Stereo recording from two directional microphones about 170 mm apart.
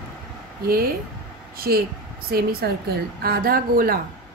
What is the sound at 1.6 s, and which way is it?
Speech, 65° right (ahead or behind).